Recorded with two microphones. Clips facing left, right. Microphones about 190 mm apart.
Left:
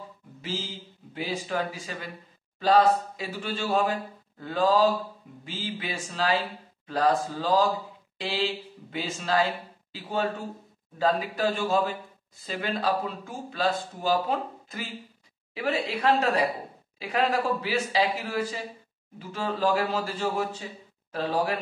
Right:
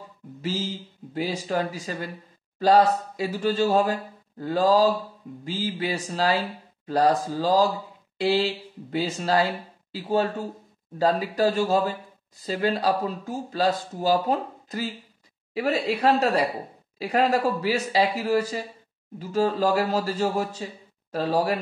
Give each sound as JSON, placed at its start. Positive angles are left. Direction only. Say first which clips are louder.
{"t": 1.1, "sound": "speech", "louder": "right 4 dB", "side_deg": -40}